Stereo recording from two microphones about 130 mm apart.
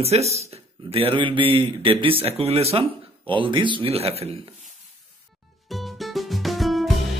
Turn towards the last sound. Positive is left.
turn(degrees=0)  # may be behind; listen again after turning